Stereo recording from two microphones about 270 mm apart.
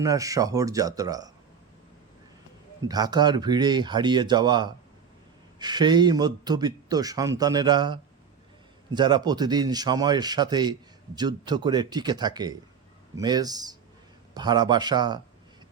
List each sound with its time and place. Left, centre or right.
0.0 s speech: centre
2.8 s speech: centre